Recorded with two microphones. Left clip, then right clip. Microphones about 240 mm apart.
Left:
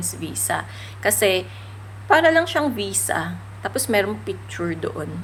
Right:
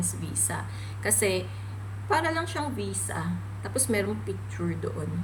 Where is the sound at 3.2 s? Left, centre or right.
Left.